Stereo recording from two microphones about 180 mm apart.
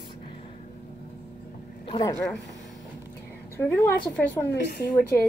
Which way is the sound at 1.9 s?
20° left (ahead or behind).